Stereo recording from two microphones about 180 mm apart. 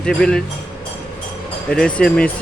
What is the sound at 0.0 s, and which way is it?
Speech, 5° left (ahead or behind).